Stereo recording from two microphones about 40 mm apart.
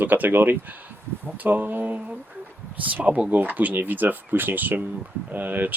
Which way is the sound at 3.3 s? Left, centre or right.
Right.